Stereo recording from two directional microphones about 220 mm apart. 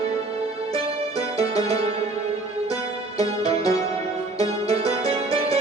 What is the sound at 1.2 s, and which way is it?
Music, 15° left (ahead or behind).